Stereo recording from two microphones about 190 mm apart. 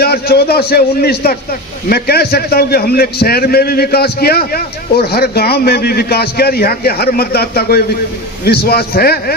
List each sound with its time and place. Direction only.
0.0 s a man's voice: 55° left (ahead or behind)